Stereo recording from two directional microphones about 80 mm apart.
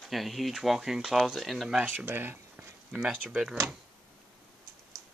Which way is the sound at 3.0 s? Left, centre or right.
Centre.